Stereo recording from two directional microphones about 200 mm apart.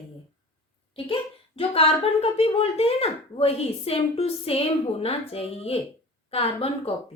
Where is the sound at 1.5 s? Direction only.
30° left (ahead or behind).